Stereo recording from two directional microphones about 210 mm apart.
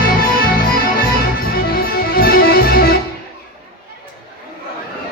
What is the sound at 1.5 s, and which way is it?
Music, 45° left (ahead or behind).